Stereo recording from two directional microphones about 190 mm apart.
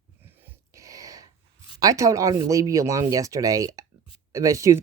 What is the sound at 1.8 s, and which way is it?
Speech, 15° right (ahead or behind).